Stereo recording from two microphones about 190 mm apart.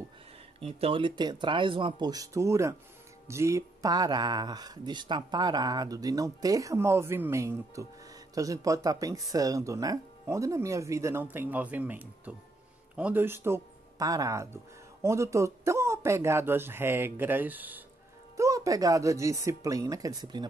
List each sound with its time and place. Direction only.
0.6 s speech: 30° right (ahead or behind)